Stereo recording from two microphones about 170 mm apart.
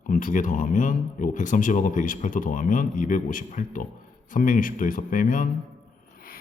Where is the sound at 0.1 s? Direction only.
50° left (ahead or behind).